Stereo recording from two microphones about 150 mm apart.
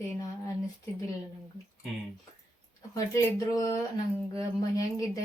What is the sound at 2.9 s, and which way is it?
Speech, 20° left (ahead or behind).